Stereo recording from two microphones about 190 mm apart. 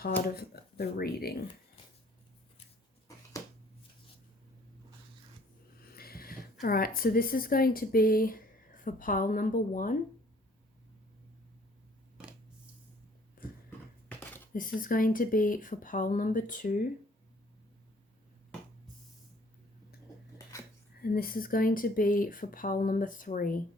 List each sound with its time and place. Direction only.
0.3 s speech: 55° left (ahead or behind)
6.0 s speech: 50° left (ahead or behind)
13.4 s a sound: 50° left (ahead or behind)
14.5 s speech: 45° left (ahead or behind)
21.0 s speech: 50° left (ahead or behind)